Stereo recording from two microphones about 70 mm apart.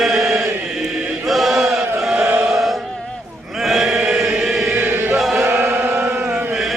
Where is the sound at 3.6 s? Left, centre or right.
Centre.